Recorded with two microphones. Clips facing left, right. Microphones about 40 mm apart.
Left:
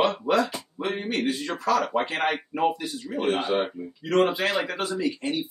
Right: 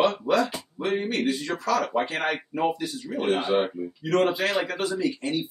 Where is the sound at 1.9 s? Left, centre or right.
Centre.